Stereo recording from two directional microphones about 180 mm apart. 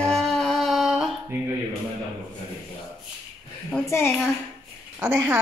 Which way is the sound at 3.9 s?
15° left (ahead or behind).